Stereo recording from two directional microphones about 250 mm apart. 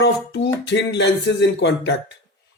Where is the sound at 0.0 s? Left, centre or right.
Left.